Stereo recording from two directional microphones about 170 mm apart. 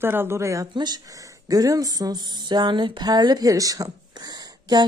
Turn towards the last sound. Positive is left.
turn(degrees=-25)  # may be behind; listen again after turning